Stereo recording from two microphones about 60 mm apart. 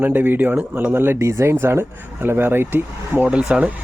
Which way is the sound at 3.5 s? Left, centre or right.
Right.